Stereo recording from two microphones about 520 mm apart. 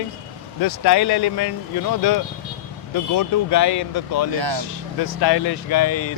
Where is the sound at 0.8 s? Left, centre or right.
Left.